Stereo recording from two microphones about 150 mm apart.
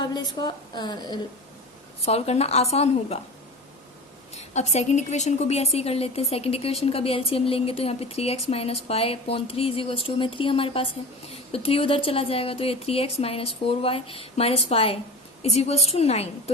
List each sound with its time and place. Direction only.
0.0 s a woman's voice: 30° left (ahead or behind)
2.0 s a woman's voice: 45° left (ahead or behind)
4.4 s a woman's voice: 50° left (ahead or behind)